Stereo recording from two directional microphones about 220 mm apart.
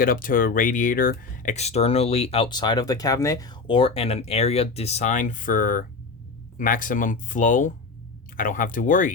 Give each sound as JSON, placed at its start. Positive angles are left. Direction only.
{"t": 0.0, "sound": "speech", "side_deg": 40}